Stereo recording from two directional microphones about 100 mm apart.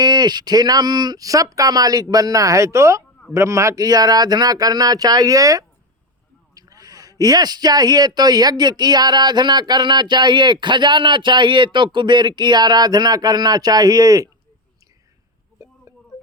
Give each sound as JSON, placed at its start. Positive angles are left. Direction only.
{"t": 0.0, "sound": "a man's voice", "side_deg": -45}